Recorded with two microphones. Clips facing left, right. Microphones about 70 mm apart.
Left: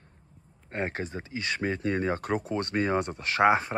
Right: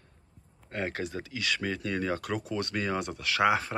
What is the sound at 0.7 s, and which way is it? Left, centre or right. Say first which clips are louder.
Speech: left 1 dB; left.